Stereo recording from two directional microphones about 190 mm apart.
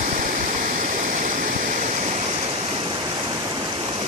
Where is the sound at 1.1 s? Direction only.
45° right (ahead or behind).